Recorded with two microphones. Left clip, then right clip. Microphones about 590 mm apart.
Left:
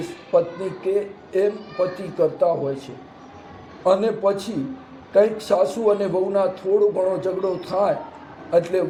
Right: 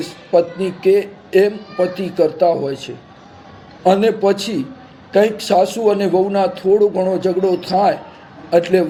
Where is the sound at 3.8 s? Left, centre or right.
Right.